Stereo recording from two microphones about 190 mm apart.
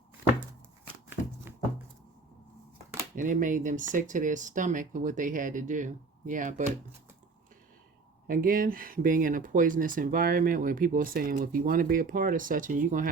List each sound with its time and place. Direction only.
3.2 s speech: 45° right (ahead or behind)
8.3 s speech: 50° right (ahead or behind)